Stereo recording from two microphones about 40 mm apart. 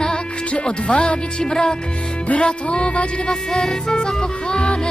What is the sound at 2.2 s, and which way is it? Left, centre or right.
Music, left.